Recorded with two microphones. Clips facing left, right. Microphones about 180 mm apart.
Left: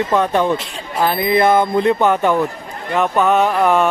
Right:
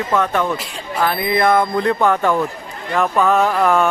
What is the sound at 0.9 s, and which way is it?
Music, 25° left (ahead or behind).